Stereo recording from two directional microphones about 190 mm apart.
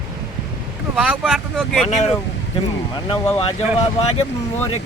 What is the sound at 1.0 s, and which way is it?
Speech, 5° right (ahead or behind).